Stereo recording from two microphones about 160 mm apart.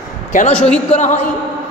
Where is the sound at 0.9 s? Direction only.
45° left (ahead or behind).